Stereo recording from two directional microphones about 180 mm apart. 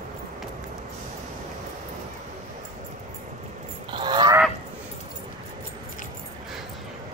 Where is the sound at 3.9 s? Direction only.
25° right (ahead or behind).